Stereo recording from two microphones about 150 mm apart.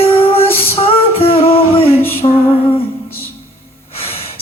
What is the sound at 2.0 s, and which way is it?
Music, 15° left (ahead or behind).